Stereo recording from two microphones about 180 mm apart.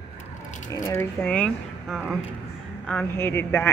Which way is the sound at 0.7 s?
15° left (ahead or behind).